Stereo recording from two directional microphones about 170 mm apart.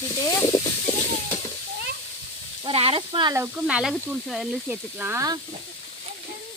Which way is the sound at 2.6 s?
35° right (ahead or behind).